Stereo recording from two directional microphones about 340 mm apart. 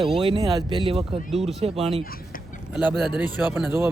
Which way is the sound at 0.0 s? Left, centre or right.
Centre.